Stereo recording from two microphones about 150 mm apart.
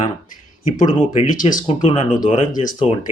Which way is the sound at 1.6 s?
40° left (ahead or behind).